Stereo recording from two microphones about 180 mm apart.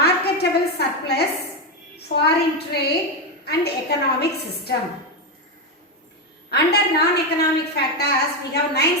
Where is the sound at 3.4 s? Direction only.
65° left (ahead or behind).